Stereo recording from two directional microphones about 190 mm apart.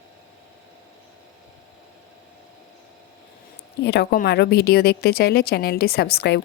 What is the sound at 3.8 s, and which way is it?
Speech, 60° left (ahead or behind).